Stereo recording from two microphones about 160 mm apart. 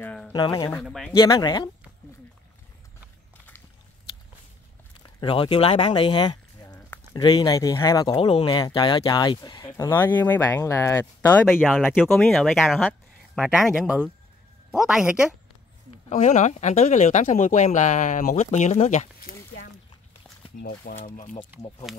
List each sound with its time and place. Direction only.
0.0 s a sound: 5° left (ahead or behind)
0.3 s speech: 25° left (ahead or behind)
0.8 s speech: centre (ahead or behind)
1.1 s speech: 25° left (ahead or behind)
5.2 s speech: 35° left (ahead or behind)
9.7 s speech: 15° left (ahead or behind)
11.6 s speech: centre (ahead or behind)
16.1 s speech: 45° left (ahead or behind)